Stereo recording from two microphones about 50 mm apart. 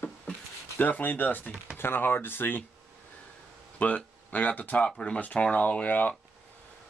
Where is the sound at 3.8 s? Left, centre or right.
Left.